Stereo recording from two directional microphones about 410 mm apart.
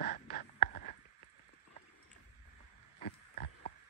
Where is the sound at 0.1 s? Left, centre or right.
Left.